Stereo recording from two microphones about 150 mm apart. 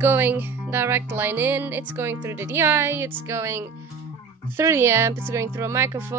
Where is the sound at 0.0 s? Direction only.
15° right (ahead or behind).